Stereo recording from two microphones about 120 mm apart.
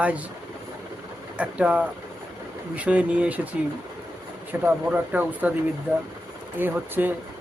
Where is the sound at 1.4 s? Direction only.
10° right (ahead or behind).